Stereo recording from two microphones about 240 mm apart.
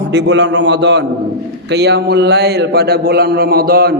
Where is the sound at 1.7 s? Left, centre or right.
Right.